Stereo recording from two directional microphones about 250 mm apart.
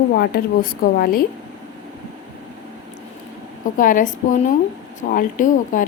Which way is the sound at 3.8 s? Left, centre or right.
Left.